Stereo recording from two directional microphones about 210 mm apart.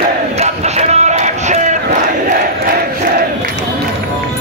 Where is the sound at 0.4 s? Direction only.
30° right (ahead or behind).